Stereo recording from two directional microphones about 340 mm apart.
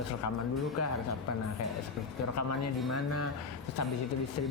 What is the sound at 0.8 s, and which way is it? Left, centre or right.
Speech, left.